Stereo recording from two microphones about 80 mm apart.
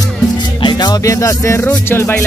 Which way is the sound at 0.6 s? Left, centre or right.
Left.